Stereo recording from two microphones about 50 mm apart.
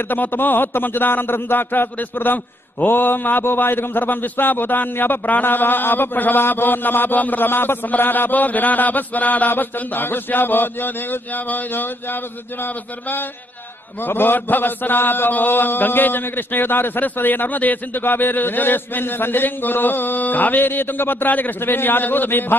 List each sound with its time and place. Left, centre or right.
0.1 s a man's voice: left